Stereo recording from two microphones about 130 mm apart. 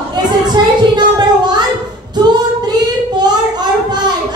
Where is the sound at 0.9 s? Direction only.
35° right (ahead or behind).